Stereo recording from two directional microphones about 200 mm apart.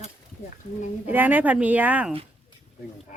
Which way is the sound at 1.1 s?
10° right (ahead or behind).